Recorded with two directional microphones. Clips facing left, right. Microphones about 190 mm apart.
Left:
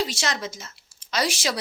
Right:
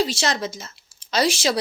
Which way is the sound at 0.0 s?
30° right (ahead or behind).